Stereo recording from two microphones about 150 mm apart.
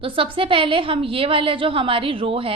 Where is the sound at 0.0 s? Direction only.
35° right (ahead or behind).